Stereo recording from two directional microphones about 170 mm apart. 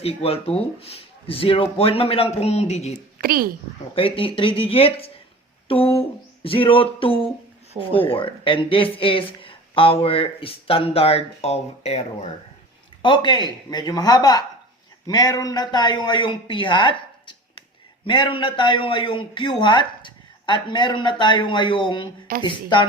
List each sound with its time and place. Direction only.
0.0 s speech: 35° left (ahead or behind)
3.2 s speech: 60° right (ahead or behind)
3.9 s speech: 30° left (ahead or behind)
13.0 s a man's voice: 30° left (ahead or behind)